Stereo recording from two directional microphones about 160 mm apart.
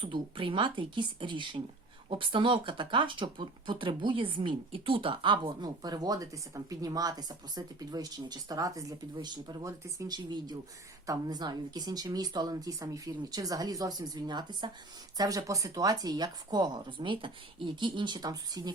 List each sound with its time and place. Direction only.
0.0 s speech: 30° right (ahead or behind)